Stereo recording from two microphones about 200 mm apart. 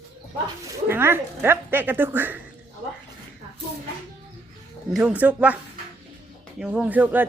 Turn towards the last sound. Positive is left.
turn(degrees=-10)  # may be behind; listen again after turning